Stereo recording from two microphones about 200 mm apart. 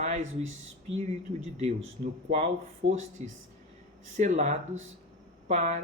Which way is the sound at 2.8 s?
30° right (ahead or behind).